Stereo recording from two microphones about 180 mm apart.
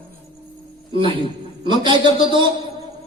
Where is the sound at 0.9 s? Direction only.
30° right (ahead or behind).